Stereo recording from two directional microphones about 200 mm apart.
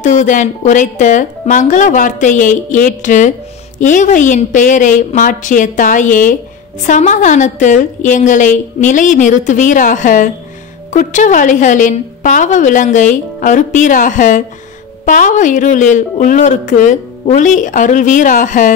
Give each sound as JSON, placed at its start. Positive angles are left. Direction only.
{"t": 0.0, "sound": "speech", "side_deg": 40}